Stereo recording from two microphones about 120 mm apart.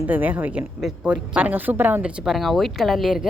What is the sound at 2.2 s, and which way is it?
Speech, centre (ahead or behind).